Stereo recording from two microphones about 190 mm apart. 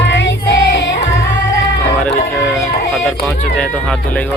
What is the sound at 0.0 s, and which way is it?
Child singing, 70° left (ahead or behind).